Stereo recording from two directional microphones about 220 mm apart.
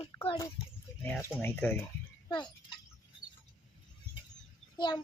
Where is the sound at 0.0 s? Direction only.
25° left (ahead or behind).